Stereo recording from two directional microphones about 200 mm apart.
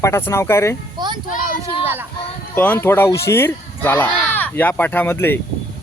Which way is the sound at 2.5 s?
10° left (ahead or behind).